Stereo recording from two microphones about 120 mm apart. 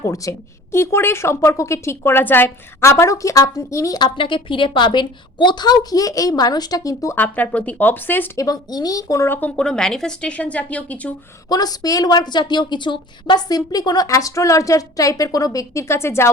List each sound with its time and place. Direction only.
0.0 s a woman's voice: 25° left (ahead or behind)
7.2 s speech: 10° left (ahead or behind)
8.4 s speech: 30° left (ahead or behind); by 11.1 s 10° left (ahead or behind)
11.4 s a woman's voice: 35° left (ahead or behind)